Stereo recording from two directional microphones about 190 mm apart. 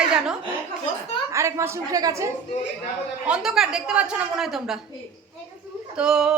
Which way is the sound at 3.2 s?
5° right (ahead or behind).